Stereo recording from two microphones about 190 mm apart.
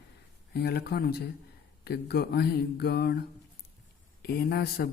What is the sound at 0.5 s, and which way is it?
Speech, 55° left (ahead or behind).